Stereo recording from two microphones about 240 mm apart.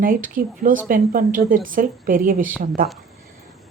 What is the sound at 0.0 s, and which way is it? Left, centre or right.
A woman's voice, right.